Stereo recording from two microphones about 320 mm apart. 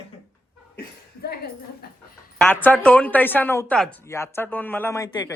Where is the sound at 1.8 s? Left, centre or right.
Left.